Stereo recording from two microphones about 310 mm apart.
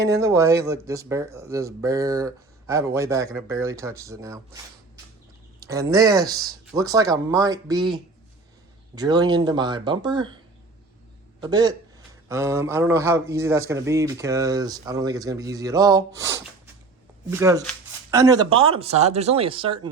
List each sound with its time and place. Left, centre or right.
0.0 s speech: centre
11.3 s a man's voice: centre